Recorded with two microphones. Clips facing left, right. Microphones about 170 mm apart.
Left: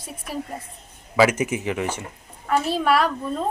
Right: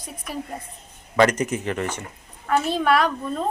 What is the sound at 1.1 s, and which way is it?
A woman's voice, 5° left (ahead or behind).